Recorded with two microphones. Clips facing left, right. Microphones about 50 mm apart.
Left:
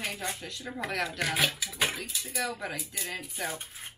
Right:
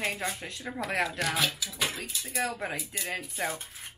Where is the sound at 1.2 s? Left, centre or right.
Centre.